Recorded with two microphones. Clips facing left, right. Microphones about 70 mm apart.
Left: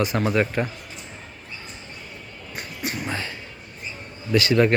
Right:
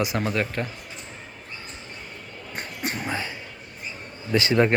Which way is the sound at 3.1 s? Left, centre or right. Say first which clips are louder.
Even; centre.